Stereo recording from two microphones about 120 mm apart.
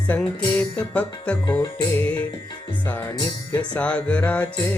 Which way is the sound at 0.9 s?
10° left (ahead or behind).